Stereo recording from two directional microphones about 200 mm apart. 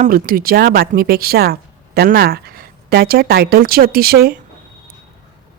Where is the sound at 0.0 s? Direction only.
45° right (ahead or behind).